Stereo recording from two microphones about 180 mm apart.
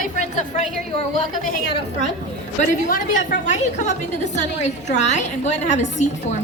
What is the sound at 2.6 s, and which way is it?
Speech, 50° left (ahead or behind).